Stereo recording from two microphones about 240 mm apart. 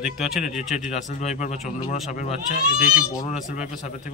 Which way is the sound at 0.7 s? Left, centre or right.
Left.